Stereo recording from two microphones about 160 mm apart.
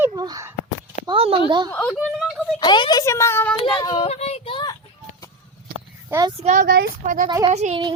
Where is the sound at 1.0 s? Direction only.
35° right (ahead or behind).